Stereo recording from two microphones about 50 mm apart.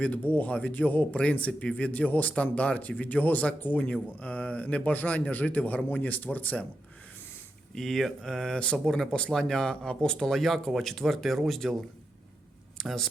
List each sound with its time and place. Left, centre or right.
0.0 s speech: left
3.8 s speech: left
7.8 s speech: centre
8.5 s speech: centre
8.8 s speech: centre
9.0 s speech: centre